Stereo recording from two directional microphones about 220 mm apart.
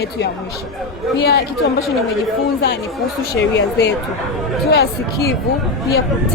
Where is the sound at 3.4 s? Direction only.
55° left (ahead or behind).